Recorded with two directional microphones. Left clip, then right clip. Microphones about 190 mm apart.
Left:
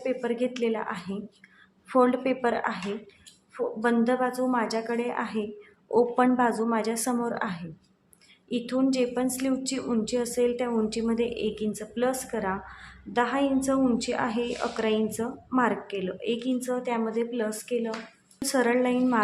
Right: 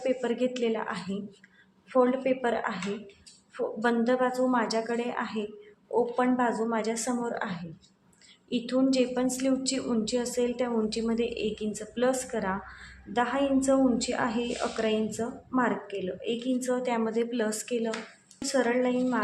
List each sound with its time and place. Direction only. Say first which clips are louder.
0.0 s a woman's voice: even; 5° left (ahead or behind)
1.9 s a woman's voice: left 2 dB; 20° left (ahead or behind)
5.9 s a woman's voice: left 4 dB; 20° left (ahead or behind); by 17.9 s centre (ahead or behind)
18.3 s a woman's voice: left 2 dB; 15° left (ahead or behind)